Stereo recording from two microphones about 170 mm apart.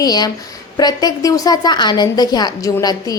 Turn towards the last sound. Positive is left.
turn(degrees=20)  # may be behind; listen again after turning